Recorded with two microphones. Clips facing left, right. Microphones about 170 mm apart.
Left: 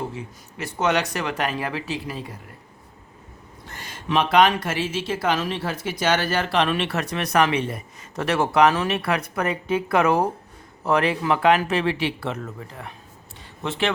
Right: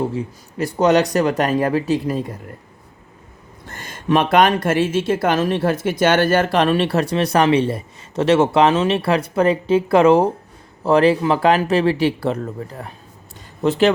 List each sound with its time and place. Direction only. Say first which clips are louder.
0.1 s speech: right 9 dB; 35° right (ahead or behind)
3.7 s speech: right 8 dB; 50° right (ahead or behind)